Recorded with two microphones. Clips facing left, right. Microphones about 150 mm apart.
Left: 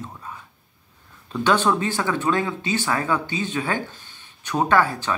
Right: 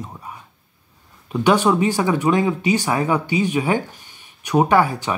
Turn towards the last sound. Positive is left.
turn(degrees=-15)  # may be behind; listen again after turning